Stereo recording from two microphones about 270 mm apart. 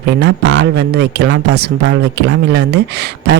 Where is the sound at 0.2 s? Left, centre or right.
Right.